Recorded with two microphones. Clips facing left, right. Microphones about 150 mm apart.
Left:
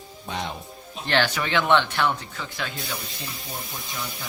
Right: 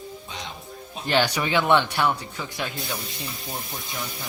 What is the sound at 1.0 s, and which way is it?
Speech, 10° right (ahead or behind).